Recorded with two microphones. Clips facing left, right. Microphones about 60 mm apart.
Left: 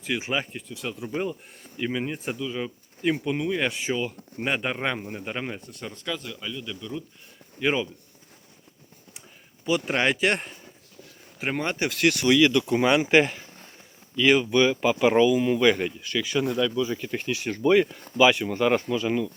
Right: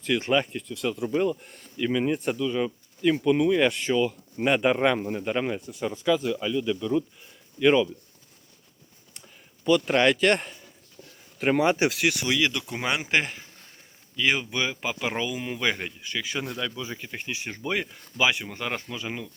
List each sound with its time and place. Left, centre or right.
0.0 s speech: centre
1.1 s speech: centre
2.0 s speech: centre
4.4 s speech: centre
5.6 s speech: centre
7.6 s speech: centre
9.6 s speech: centre
15.3 s speech: centre; by 17.1 s right
17.1 s speech: centre
17.6 s speech: centre
18.4 s speech: centre
18.9 s speech: centre